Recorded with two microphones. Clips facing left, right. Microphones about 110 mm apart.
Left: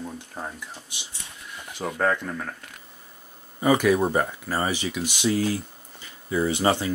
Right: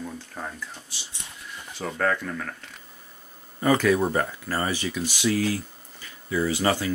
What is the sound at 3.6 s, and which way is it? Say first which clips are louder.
Speech: left 1 dB; 15° left (ahead or behind).